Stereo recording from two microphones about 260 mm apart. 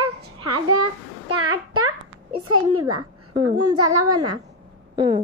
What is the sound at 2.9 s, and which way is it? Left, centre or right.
Speech, centre.